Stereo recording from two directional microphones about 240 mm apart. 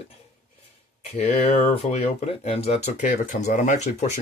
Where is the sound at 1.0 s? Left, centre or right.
Left.